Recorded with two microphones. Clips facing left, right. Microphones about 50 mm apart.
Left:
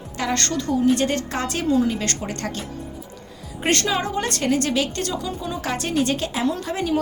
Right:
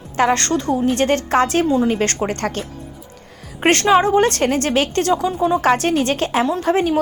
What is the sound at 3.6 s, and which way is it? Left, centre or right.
A woman's voice, right.